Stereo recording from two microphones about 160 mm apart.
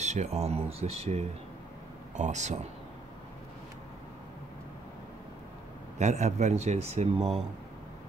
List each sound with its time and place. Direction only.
0.0 s speech: 45° right (ahead or behind)
5.9 s speech: 45° right (ahead or behind)